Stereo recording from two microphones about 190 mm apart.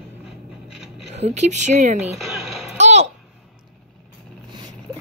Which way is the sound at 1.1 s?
35° right (ahead or behind).